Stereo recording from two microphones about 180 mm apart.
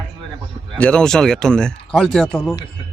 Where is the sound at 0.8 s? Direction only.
5° left (ahead or behind).